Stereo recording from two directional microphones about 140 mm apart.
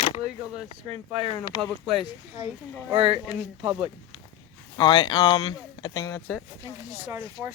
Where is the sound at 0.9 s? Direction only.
50° right (ahead or behind).